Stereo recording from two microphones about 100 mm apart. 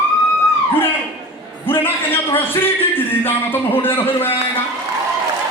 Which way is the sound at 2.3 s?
20° left (ahead or behind).